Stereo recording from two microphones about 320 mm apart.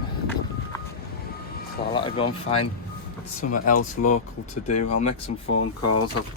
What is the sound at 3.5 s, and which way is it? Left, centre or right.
Mechanisms, left.